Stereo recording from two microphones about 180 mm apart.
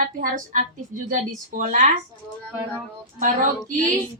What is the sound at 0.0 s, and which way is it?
A woman's voice, 50° right (ahead or behind).